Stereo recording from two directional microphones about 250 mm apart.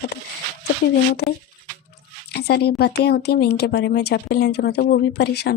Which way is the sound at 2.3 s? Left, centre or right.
Left.